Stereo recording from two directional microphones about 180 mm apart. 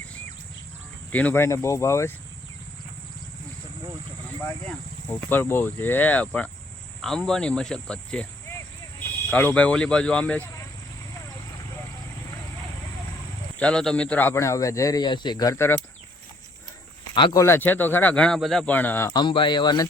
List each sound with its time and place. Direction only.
1.1 s speech: 10° left (ahead or behind)
5.3 s speech: 10° left (ahead or behind)
13.6 s speech: 5° left (ahead or behind)
17.2 s speech: 25° left (ahead or behind)
17.4 s speech: 10° left (ahead or behind)
19.1 s speech: 25° left (ahead or behind)